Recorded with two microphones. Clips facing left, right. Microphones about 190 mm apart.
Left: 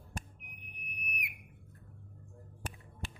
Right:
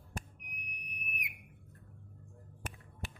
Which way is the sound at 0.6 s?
20° right (ahead or behind).